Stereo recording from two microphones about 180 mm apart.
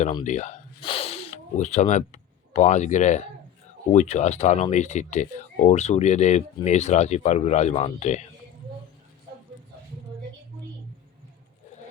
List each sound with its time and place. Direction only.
0.3 s speech: 40° left (ahead or behind)
0.8 s speech: 30° left (ahead or behind)